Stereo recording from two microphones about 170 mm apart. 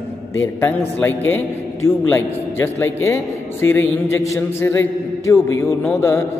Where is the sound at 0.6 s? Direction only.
10° left (ahead or behind).